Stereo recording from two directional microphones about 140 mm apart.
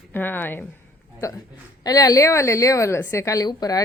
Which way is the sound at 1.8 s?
25° left (ahead or behind).